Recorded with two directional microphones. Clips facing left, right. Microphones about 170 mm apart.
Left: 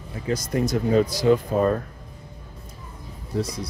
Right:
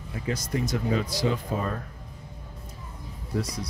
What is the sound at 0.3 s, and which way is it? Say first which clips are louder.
Speech: left 5 dB; 40° left (ahead or behind).